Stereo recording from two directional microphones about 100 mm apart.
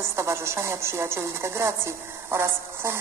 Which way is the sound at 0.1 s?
25° right (ahead or behind).